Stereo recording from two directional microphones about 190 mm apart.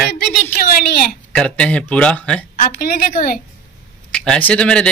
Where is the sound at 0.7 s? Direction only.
50° left (ahead or behind).